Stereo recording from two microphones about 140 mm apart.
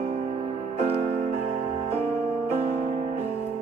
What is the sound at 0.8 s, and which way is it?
Music, 45° right (ahead or behind).